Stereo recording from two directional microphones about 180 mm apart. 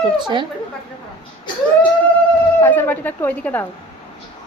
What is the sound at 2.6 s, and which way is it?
A woman's voice, 10° left (ahead or behind).